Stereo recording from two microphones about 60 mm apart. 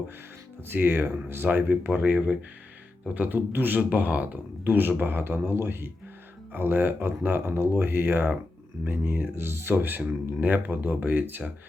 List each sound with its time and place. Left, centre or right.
0.7 s speech: right